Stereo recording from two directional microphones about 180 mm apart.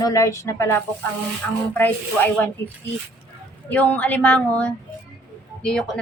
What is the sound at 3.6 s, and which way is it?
A woman's voice, 10° left (ahead or behind).